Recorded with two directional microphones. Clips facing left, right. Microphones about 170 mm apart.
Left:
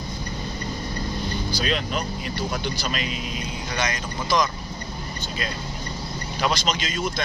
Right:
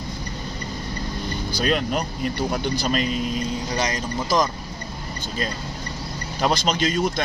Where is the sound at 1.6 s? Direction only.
45° right (ahead or behind).